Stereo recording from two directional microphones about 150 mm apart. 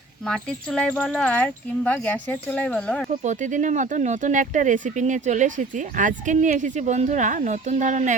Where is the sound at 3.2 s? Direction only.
55° right (ahead or behind).